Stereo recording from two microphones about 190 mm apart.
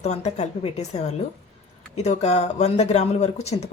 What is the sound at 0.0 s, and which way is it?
Speech, 35° left (ahead or behind).